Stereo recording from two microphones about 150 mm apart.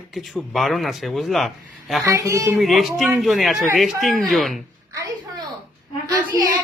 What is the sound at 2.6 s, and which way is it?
Speech, centre (ahead or behind).